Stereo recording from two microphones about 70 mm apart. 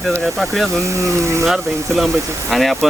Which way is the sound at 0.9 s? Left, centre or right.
Right.